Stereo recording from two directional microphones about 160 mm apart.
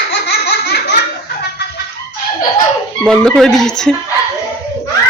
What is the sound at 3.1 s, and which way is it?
Speech, 5° left (ahead or behind).